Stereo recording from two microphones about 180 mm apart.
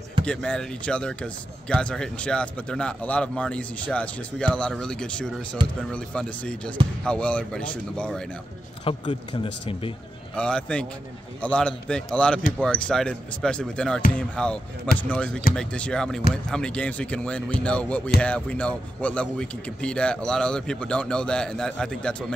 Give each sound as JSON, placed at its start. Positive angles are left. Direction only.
{"t": 0.2, "sound": "a man's voice", "side_deg": 5}
{"t": 8.8, "sound": "speech", "side_deg": 30}
{"t": 10.3, "sound": "a man's voice", "side_deg": 5}